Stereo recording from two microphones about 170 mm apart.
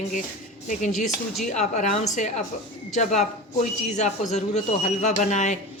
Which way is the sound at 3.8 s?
45° left (ahead or behind).